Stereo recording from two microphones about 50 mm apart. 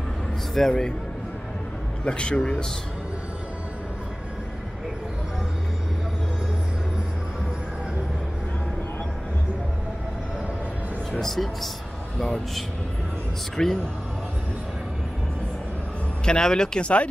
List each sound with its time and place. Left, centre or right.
0.6 s speech: centre
2.0 s a man's voice: centre
11.1 s speech: centre
13.6 s speech: centre
16.3 s speech: centre